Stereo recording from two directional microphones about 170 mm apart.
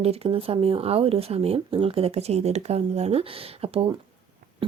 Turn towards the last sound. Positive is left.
turn(degrees=-35)  # may be behind; listen again after turning